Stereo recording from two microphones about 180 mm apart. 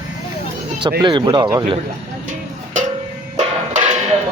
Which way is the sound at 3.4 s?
40° right (ahead or behind).